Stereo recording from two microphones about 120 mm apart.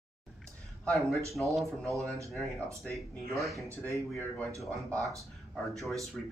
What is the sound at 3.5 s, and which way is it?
Speech, 25° right (ahead or behind).